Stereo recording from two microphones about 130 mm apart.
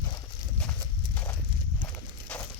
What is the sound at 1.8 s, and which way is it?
Horse, 15° left (ahead or behind).